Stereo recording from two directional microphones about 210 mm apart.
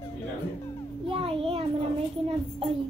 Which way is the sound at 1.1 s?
25° right (ahead or behind).